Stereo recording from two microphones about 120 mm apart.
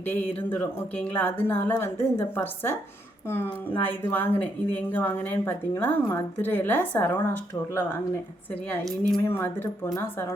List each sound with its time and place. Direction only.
0.0 s a woman's voice: 15° left (ahead or behind)
9.2 s speech: 20° left (ahead or behind)